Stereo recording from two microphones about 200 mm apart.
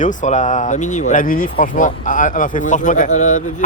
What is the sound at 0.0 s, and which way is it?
Speech, 40° left (ahead or behind).